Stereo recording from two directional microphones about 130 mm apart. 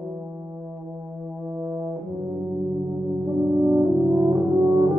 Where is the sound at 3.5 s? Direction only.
25° right (ahead or behind).